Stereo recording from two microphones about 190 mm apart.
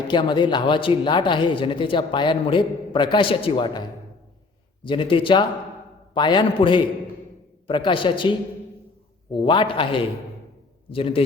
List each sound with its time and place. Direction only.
0.1 s speech: 25° left (ahead or behind)
9.3 s speech: 25° left (ahead or behind)
10.9 s speech: 30° left (ahead or behind)